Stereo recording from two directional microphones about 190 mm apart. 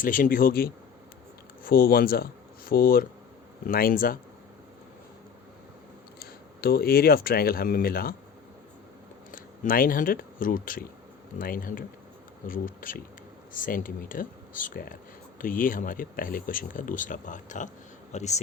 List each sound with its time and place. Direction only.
0.0 s speech: 45° left (ahead or behind)
6.1 s speech: 50° left (ahead or behind)
9.3 s speech: 45° left (ahead or behind)